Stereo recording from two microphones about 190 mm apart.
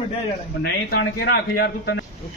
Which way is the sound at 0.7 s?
65° left (ahead or behind).